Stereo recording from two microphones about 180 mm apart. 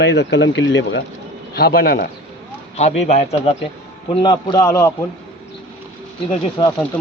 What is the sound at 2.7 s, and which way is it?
Speech, 40° left (ahead or behind).